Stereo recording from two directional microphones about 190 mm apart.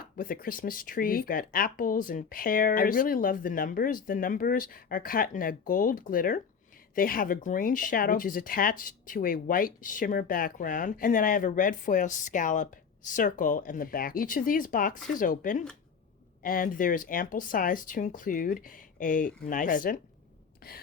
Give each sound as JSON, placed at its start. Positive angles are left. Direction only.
{"t": 0.0, "sound": "speech", "side_deg": 50}